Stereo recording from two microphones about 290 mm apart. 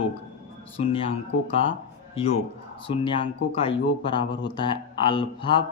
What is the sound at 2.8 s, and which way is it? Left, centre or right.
Speech, centre.